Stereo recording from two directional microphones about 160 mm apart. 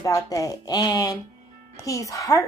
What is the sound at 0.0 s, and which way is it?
A woman's voice, 20° left (ahead or behind).